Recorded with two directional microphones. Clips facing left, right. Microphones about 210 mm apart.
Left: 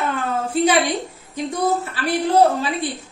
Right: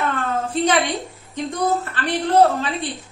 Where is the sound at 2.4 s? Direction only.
15° left (ahead or behind).